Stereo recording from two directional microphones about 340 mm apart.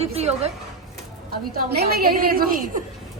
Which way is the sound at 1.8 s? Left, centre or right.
Right.